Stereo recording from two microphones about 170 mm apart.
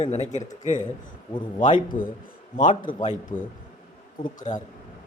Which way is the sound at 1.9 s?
55° left (ahead or behind).